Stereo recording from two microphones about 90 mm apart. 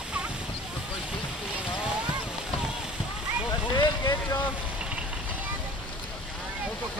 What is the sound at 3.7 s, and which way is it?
Vehicle, 50° left (ahead or behind).